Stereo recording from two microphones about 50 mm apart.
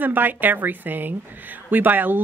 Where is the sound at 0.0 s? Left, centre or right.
Right.